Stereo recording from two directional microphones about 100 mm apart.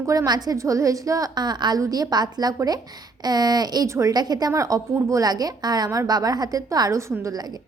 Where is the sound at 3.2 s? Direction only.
40° right (ahead or behind).